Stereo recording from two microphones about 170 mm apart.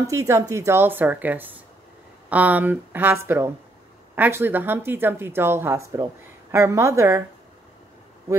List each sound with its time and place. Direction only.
0.0 s speech: 20° right (ahead or behind)